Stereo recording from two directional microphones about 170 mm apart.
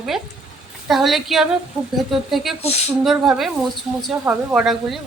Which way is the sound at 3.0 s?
Centre (ahead or behind).